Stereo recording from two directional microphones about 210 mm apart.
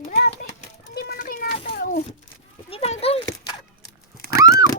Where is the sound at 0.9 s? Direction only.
45° left (ahead or behind).